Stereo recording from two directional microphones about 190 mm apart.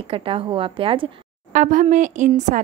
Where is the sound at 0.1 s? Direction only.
30° right (ahead or behind).